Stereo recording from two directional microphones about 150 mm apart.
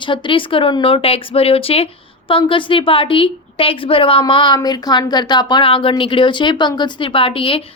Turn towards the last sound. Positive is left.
turn(degrees=35)  # may be behind; listen again after turning